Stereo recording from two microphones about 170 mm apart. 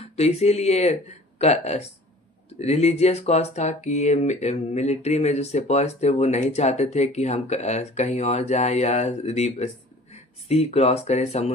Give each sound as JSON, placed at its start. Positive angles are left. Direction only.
{"t": 0.2, "sound": "speech", "side_deg": 40}